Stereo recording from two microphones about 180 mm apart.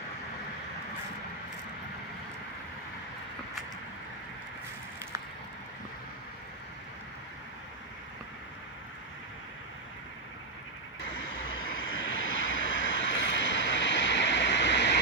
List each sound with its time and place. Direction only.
11.2 s vehicle: 90° left